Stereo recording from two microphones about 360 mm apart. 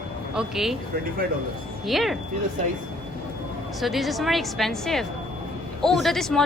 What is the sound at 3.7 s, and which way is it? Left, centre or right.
Speech, centre.